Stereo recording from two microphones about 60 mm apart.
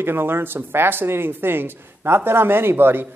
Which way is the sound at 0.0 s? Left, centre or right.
Right.